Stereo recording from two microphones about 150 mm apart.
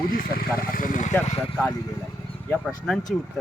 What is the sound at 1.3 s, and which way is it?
Speech, 40° left (ahead or behind).